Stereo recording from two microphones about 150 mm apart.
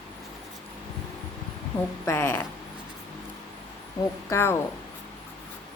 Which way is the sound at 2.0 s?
15° left (ahead or behind).